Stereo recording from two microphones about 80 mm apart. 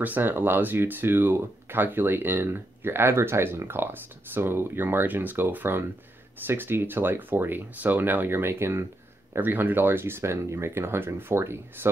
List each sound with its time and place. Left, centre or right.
0.0 s speech: right